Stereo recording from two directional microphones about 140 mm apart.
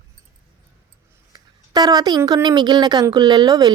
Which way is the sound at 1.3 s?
30° right (ahead or behind).